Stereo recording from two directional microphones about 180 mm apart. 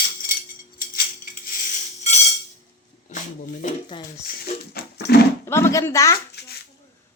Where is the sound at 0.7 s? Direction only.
50° left (ahead or behind).